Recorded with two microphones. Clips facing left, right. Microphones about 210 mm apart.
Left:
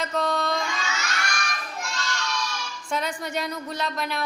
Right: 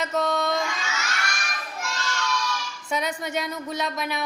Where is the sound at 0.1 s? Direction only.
20° right (ahead or behind).